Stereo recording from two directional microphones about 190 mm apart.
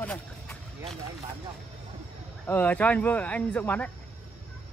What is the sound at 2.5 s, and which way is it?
Speech, 10° left (ahead or behind).